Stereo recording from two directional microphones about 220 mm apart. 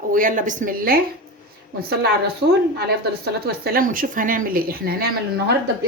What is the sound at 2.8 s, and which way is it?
Speech, 45° right (ahead or behind).